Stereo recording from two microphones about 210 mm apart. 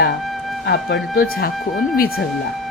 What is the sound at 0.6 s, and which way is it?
Speech, 50° left (ahead or behind).